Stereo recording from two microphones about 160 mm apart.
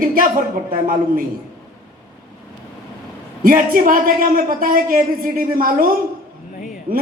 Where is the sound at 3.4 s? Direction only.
60° right (ahead or behind).